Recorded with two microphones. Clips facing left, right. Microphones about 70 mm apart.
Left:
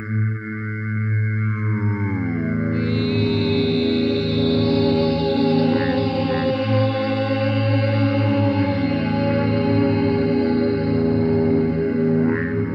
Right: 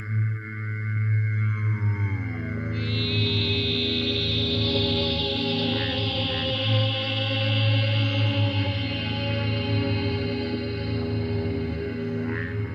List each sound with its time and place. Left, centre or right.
2.2 s music: left